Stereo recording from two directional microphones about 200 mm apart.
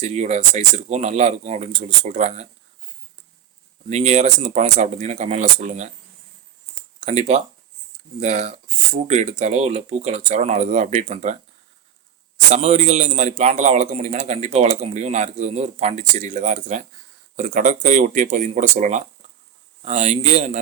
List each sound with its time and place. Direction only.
0.0 s a man's voice: 35° right (ahead or behind)
3.8 s a man's voice: 35° right (ahead or behind)
7.0 s a man's voice: 35° right (ahead or behind)
12.5 s a man's voice: 35° right (ahead or behind)